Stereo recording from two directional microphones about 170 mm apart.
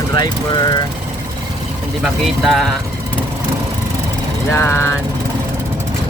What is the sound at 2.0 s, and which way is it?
Speech, centre (ahead or behind).